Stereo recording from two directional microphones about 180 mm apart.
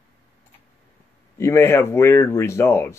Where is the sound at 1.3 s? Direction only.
15° left (ahead or behind).